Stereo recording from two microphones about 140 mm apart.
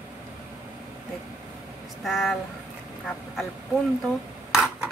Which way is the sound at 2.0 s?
Centre (ahead or behind).